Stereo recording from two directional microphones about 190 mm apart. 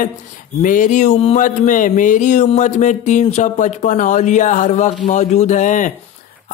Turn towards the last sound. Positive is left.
turn(degrees=40)  # may be behind; listen again after turning